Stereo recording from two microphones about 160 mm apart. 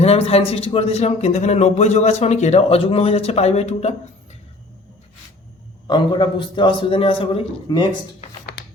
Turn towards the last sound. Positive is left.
turn(degrees=30)  # may be behind; listen again after turning